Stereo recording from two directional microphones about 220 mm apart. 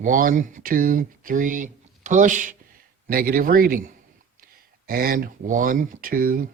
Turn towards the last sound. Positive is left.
turn(degrees=-40)  # may be behind; listen again after turning